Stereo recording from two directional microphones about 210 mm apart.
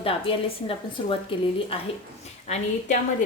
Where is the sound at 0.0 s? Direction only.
25° left (ahead or behind).